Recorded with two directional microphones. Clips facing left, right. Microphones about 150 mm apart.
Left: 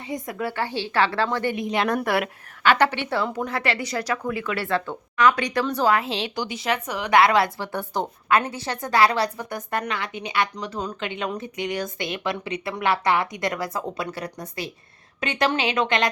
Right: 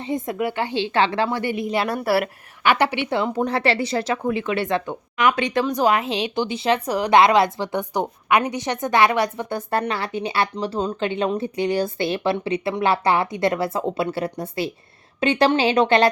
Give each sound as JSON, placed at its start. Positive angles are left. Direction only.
{"t": 0.0, "sound": "a woman's voice", "side_deg": -25}
{"t": 7.2, "sound": "a woman's voice", "side_deg": -20}